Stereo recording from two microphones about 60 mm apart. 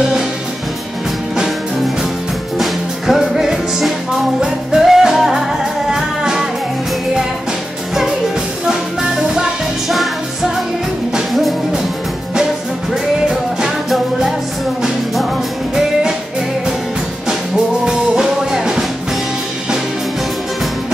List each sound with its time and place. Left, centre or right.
2.6 s music: centre
7.9 s music: centre
13.3 s music: centre
15.7 s music: centre
17.8 s music: centre